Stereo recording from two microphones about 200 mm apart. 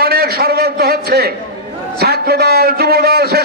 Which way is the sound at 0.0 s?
50° right (ahead or behind).